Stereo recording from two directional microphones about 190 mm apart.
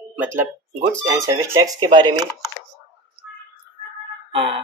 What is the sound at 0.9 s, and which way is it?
Speech, 15° right (ahead or behind).